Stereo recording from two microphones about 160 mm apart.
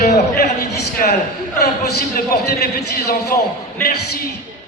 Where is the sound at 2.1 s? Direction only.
80° left.